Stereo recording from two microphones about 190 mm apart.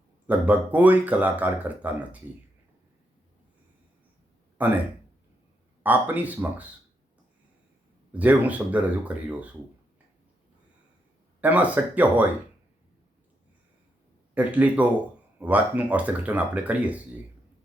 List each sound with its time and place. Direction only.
0.3 s speech: 10° right (ahead or behind)
4.6 s speech: 10° right (ahead or behind)
5.8 s speech: 10° right (ahead or behind)
8.1 s speech: 10° right (ahead or behind)
11.3 s speech: 10° right (ahead or behind)
14.3 s speech: 5° right (ahead or behind)